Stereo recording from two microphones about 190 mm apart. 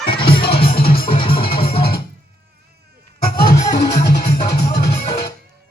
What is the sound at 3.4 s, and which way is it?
Music, 50° left (ahead or behind).